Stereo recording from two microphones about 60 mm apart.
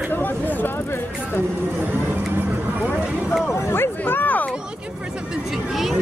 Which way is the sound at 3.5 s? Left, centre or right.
Left.